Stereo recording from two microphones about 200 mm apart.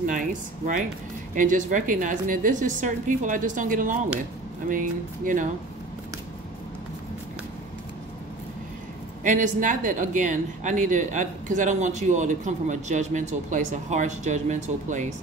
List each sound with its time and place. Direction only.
0.0 s speech: 40° right (ahead or behind)
9.2 s speech: 40° right (ahead or behind)